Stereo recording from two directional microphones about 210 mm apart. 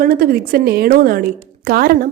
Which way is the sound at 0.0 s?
45° right (ahead or behind).